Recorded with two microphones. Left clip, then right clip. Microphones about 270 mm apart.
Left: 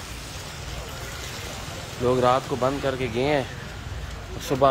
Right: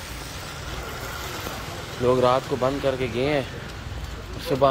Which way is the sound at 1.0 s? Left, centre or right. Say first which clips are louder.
Right 3 dB; centre.